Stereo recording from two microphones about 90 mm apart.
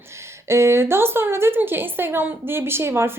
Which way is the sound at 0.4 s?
30° right (ahead or behind).